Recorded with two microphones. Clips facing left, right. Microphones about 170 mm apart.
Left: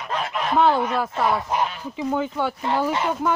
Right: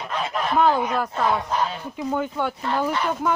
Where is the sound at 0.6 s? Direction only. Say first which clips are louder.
Left 1 dB; centre (ahead or behind).